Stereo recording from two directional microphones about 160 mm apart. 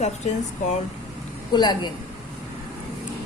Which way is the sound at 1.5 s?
25° left (ahead or behind).